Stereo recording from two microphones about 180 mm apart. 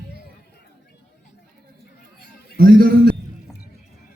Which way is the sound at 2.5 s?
55° right (ahead or behind).